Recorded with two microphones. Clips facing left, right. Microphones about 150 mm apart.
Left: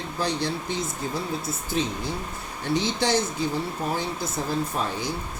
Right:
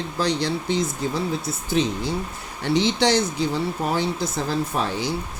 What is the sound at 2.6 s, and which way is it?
Speech, 85° right.